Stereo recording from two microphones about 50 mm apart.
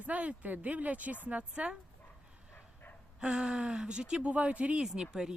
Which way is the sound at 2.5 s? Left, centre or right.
Left.